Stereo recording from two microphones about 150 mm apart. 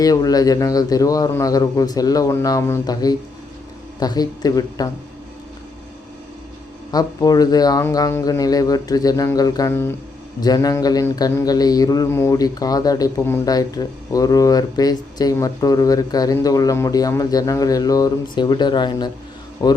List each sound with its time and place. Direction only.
0.0 s speech: 25° left (ahead or behind)
6.9 s speech: 25° left (ahead or behind)